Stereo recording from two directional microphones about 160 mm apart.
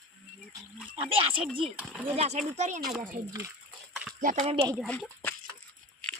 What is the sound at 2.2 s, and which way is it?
Speech, 45° right (ahead or behind).